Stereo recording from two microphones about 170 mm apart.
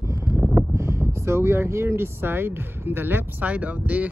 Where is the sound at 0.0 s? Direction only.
15° right (ahead or behind).